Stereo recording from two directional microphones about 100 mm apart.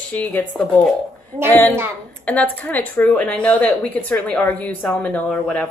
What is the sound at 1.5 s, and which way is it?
Speech, 15° left (ahead or behind).